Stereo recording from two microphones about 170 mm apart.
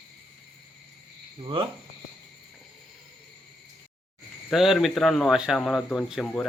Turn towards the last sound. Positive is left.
turn(degrees=0)  # may be behind; listen again after turning